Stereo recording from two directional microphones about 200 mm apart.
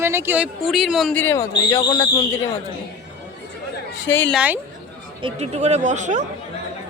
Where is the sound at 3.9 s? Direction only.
65° left (ahead or behind).